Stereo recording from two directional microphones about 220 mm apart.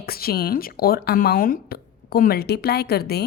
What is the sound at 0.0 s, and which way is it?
A woman's voice, 45° left (ahead or behind).